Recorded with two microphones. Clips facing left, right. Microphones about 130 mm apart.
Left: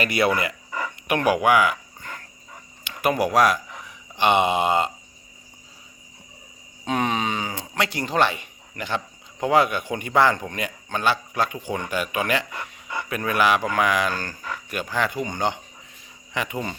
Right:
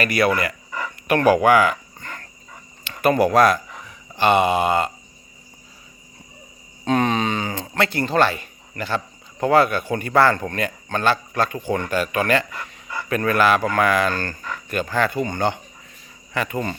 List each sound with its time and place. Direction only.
0.0 s speech: 20° left (ahead or behind)
0.7 s dog: 15° left (ahead or behind)
2.9 s speech: 10° left (ahead or behind)
6.8 s a man's voice: 10° left (ahead or behind)
13.1 s a man's voice: 10° left (ahead or behind)